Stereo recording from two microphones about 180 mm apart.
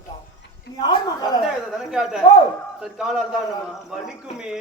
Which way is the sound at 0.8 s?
20° left (ahead or behind).